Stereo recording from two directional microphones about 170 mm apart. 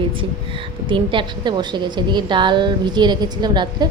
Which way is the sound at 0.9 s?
30° right (ahead or behind).